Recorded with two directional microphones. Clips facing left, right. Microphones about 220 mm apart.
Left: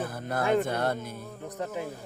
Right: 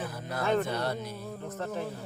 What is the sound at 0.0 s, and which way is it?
Music, 50° left (ahead or behind).